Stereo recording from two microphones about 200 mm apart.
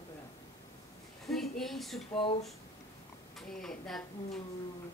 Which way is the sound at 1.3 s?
Centre (ahead or behind).